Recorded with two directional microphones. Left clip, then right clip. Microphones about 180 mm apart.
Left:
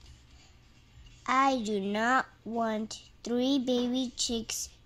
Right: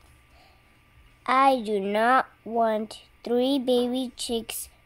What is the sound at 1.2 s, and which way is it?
A woman's voice, 20° right (ahead or behind).